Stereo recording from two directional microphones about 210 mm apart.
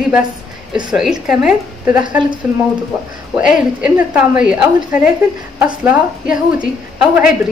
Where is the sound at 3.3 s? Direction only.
5° right (ahead or behind).